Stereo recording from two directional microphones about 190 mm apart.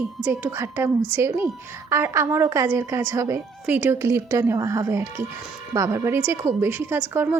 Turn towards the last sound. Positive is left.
turn(degrees=-10)  # may be behind; listen again after turning